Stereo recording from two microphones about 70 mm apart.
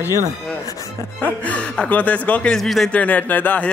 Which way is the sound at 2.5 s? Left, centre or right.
Centre.